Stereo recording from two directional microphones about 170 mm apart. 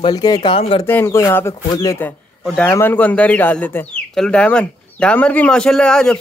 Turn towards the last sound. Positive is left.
turn(degrees=5)  # may be behind; listen again after turning